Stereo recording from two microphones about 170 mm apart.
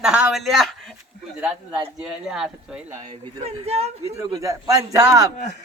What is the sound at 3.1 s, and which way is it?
Speech, 35° right (ahead or behind).